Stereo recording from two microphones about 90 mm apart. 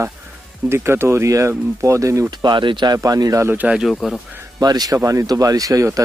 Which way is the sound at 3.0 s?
45° right (ahead or behind).